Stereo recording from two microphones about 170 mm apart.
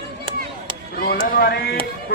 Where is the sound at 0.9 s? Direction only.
65° left (ahead or behind).